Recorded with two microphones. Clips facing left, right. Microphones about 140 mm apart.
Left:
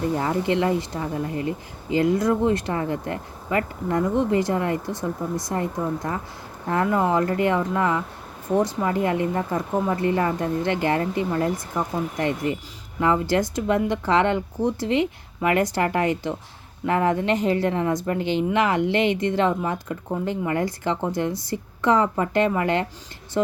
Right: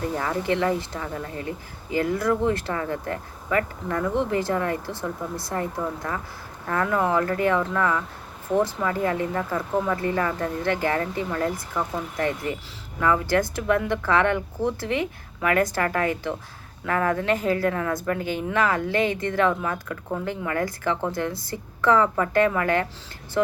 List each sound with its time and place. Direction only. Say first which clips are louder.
0.2 s speech: left 2 dB; 20° left (ahead or behind)
18.2 s speech: left 5 dB; 45° right (ahead or behind)
18.5 s speech: even; 20° left (ahead or behind)